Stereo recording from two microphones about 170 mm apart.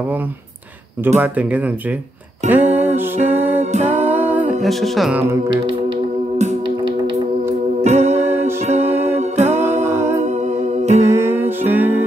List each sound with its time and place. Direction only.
1.0 s speech: 10° right (ahead or behind)
2.4 s music: 40° right (ahead or behind)
4.1 s music: 10° right (ahead or behind)
4.6 s music: centre (ahead or behind)
7.8 s music: 40° right (ahead or behind)
9.8 s a capella: 15° right (ahead or behind)
10.2 s music: 40° right (ahead or behind)
11.1 s music: 15° right (ahead or behind)